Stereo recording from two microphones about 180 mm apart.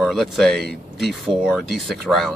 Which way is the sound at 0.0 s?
Centre (ahead or behind).